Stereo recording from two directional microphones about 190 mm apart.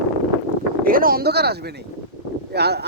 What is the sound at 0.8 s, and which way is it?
Speech, 50° right (ahead or behind).